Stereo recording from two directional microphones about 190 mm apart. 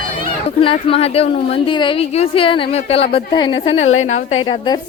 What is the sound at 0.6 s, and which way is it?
A woman's voice, 30° left (ahead or behind).